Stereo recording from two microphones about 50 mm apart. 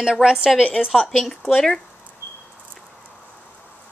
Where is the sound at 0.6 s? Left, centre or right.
Left.